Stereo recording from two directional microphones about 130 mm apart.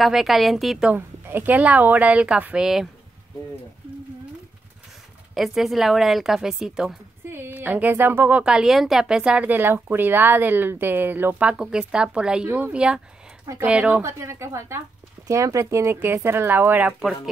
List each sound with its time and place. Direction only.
0.0 s a woman's voice: centre (ahead or behind)
0.9 s a woman's voice: 15° right (ahead or behind)
5.3 s a woman's voice: centre (ahead or behind)
7.2 s a woman's voice: 20° right (ahead or behind)
14.0 s speech: 20° right (ahead or behind)